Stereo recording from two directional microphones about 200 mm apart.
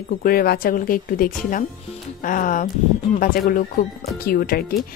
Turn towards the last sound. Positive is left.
turn(degrees=50)  # may be behind; listen again after turning